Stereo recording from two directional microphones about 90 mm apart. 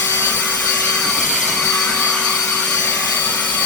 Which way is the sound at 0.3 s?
20° left (ahead or behind).